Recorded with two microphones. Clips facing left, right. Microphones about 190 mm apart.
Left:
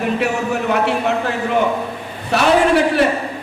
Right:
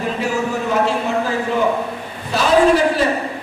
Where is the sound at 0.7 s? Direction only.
65° left (ahead or behind).